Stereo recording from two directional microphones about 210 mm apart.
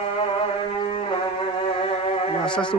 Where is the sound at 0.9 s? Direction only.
30° left (ahead or behind).